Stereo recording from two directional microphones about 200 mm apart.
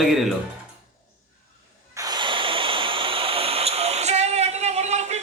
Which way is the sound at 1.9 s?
20° right (ahead or behind).